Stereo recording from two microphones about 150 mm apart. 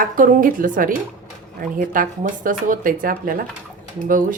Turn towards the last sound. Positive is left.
turn(degrees=-65)  # may be behind; listen again after turning